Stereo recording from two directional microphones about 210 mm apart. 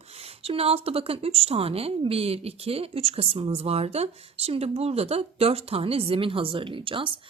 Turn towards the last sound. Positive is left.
turn(degrees=-25)  # may be behind; listen again after turning